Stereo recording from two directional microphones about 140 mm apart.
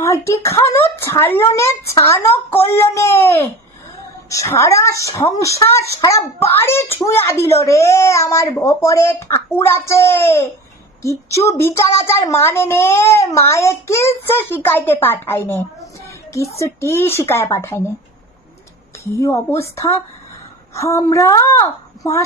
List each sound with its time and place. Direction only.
0.3 s a child's voice: 20° left (ahead or behind)
19.1 s speech: 20° left (ahead or behind)